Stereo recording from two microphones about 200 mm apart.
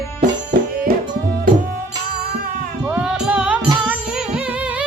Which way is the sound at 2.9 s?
5° right (ahead or behind).